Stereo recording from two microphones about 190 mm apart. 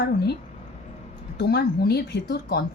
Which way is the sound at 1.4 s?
60° left (ahead or behind).